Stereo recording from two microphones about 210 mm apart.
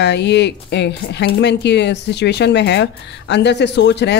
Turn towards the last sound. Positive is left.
turn(degrees=55)  # may be behind; listen again after turning